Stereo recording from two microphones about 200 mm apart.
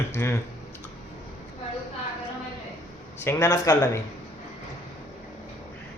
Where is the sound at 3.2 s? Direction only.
15° left (ahead or behind).